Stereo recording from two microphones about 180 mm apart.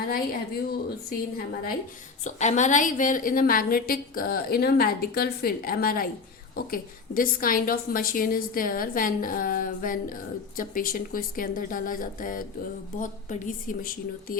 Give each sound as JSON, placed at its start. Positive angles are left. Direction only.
{"t": 0.1, "sound": "a woman's voice", "side_deg": 55}
{"t": 2.2, "sound": "a woman's voice", "side_deg": 40}